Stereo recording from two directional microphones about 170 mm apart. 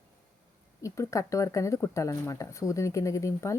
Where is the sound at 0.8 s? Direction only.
20° left (ahead or behind).